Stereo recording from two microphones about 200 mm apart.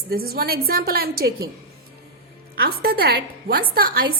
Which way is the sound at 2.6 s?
50° right (ahead or behind).